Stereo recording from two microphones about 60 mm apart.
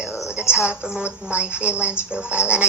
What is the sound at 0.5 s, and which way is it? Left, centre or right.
A woman's voice, centre.